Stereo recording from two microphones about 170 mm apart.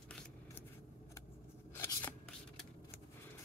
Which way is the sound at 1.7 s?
15° left (ahead or behind).